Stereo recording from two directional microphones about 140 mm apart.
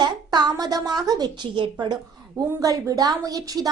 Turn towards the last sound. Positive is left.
turn(degrees=-25)  # may be behind; listen again after turning